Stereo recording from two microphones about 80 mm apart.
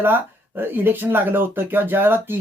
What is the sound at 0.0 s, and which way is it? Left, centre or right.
Speech, right.